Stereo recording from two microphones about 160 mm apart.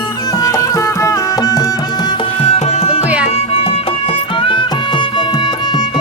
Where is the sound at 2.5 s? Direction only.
40° left (ahead or behind).